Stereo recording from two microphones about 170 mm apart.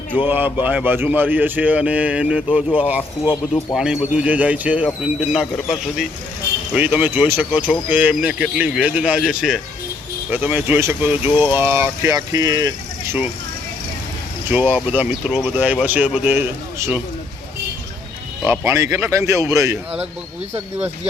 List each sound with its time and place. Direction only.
0.3 s a man's voice: 10° right (ahead or behind)
14.5 s speech: 10° right (ahead or behind)
18.4 s speech: 15° right (ahead or behind)